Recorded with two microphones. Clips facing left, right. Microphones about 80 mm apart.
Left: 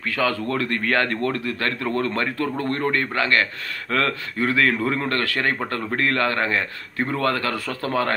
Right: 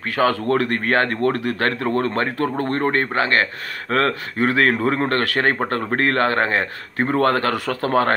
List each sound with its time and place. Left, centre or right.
0.1 s a man's voice: right